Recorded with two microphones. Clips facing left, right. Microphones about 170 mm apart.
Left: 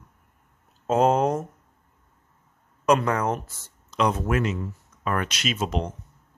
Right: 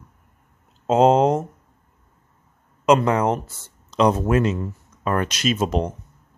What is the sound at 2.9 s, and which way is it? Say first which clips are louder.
Speech: right 4 dB; 25° right (ahead or behind).